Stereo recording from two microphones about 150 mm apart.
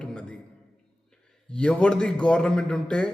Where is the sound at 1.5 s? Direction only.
5° left (ahead or behind).